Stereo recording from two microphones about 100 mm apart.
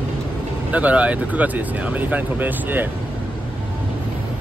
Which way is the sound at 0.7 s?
15° right (ahead or behind).